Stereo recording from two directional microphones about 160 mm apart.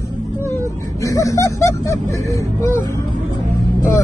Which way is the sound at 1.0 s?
20° left (ahead or behind).